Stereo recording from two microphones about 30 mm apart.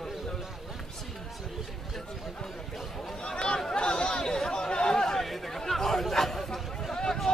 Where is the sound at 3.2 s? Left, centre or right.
Left.